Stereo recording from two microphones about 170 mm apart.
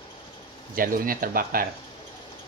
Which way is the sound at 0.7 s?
55° right (ahead or behind).